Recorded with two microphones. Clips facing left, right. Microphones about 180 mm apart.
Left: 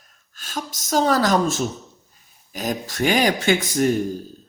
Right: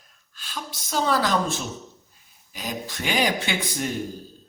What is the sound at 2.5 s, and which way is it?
A man's voice, 45° left (ahead or behind).